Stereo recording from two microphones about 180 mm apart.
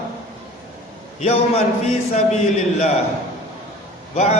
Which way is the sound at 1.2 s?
35° left (ahead or behind).